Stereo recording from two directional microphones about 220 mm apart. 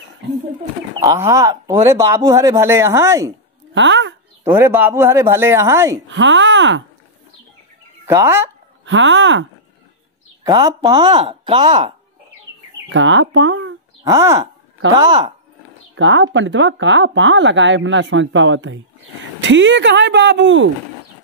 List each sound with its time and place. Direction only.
1.0 s speech: 15° right (ahead or behind)
3.7 s a woman's voice: 55° right (ahead or behind)
4.5 s speech: 10° right (ahead or behind)
6.0 s speech: 55° right (ahead or behind)
8.1 s speech: 10° right (ahead or behind)
8.8 s speech: 60° right (ahead or behind)
10.4 s speech: 15° right (ahead or behind)
12.9 s speech: 60° right (ahead or behind)
14.0 s speech: 10° right (ahead or behind)
15.9 s speech: 60° right (ahead or behind)